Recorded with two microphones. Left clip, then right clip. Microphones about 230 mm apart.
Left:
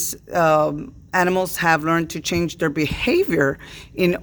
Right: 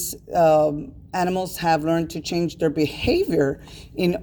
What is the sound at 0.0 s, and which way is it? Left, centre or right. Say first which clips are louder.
Speech: right 1 dB; left.